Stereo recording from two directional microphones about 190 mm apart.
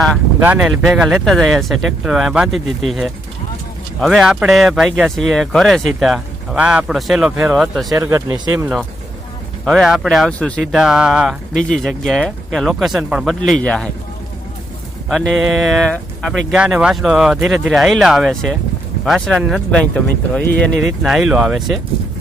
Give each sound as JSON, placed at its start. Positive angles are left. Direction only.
{"t": 0.4, "sound": "speech", "side_deg": -10}
{"t": 7.9, "sound": "speech", "side_deg": -15}
{"t": 9.6, "sound": "speech", "side_deg": 0}
{"t": 15.1, "sound": "speech", "side_deg": 0}